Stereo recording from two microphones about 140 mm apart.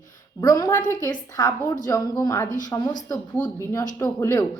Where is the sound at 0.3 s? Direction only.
25° left (ahead or behind).